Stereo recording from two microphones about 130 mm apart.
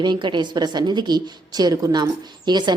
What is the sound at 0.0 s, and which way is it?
A woman's voice, 35° right (ahead or behind).